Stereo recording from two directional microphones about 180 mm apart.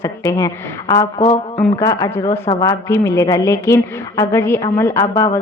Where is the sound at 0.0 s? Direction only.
20° left (ahead or behind).